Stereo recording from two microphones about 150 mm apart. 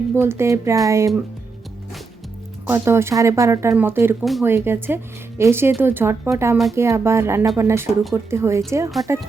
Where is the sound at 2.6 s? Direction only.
15° right (ahead or behind).